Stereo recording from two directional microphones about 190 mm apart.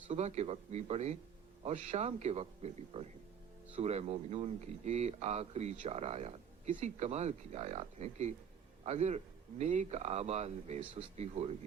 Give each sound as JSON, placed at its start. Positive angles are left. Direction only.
{"t": 0.1, "sound": "a man's voice", "side_deg": -35}